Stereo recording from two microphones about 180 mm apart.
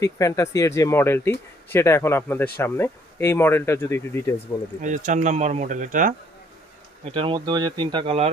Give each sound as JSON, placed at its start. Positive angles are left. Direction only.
{"t": 0.0, "sound": "speech", "side_deg": 15}
{"t": 4.8, "sound": "speech", "side_deg": -45}
{"t": 7.0, "sound": "speech", "side_deg": -30}